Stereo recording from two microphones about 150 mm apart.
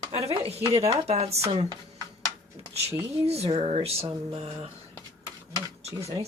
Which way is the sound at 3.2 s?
40° right (ahead or behind).